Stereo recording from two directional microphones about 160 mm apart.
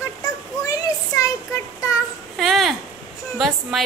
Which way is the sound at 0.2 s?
20° left (ahead or behind).